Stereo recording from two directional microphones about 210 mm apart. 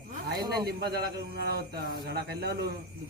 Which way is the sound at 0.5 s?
50° right (ahead or behind).